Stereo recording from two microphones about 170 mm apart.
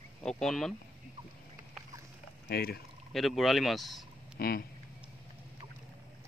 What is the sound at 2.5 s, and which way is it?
Speech, 65° left (ahead or behind).